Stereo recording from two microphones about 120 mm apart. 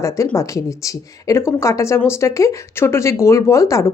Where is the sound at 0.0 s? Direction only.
25° left (ahead or behind).